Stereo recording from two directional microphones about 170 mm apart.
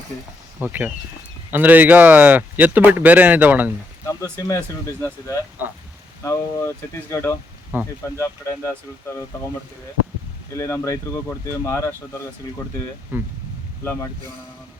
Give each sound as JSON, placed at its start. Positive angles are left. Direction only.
{"t": 0.6, "sound": "speech", "side_deg": -10}
{"t": 4.0, "sound": "speech", "side_deg": 20}
{"t": 6.2, "sound": "speech", "side_deg": 15}
{"t": 7.7, "sound": "speech", "side_deg": -10}
{"t": 8.2, "sound": "speech", "side_deg": 15}
{"t": 10.5, "sound": "speech", "side_deg": 20}
{"t": 13.1, "sound": "speech", "side_deg": -10}